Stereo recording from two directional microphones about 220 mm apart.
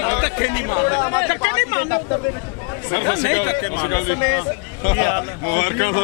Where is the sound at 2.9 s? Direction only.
15° left (ahead or behind).